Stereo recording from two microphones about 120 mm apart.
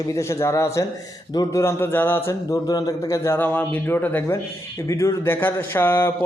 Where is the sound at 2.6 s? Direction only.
30° left (ahead or behind).